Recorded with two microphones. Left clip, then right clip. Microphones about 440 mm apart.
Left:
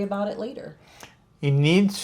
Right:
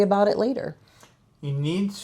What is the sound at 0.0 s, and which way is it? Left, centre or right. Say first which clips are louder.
Speech: right 8 dB; right.